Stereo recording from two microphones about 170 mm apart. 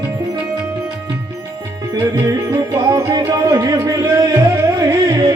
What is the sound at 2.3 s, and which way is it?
Music, 20° right (ahead or behind).